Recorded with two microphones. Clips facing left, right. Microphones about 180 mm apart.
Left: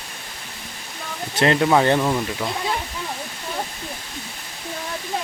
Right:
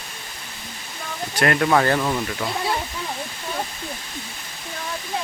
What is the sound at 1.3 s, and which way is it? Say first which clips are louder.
Speech: left 2 dB; 25° left (ahead or behind).